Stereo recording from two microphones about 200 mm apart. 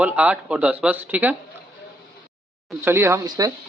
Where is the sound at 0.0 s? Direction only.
5° right (ahead or behind).